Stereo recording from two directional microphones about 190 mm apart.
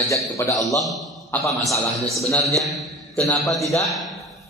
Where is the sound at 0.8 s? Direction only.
Centre (ahead or behind).